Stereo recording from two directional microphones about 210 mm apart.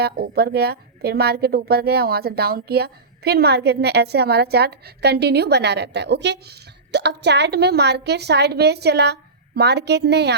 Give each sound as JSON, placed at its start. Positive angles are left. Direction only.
{"t": 0.0, "sound": "a woman's voice", "side_deg": -50}